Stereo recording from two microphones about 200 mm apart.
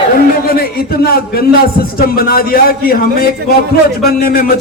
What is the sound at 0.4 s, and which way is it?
A man's voice, 50° left (ahead or behind).